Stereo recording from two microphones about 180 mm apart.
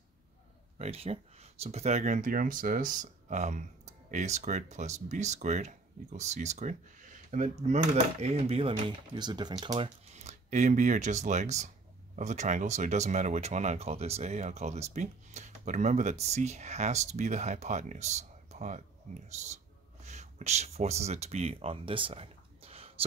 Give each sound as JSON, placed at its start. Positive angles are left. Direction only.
{"t": 0.7, "sound": "speech", "side_deg": -35}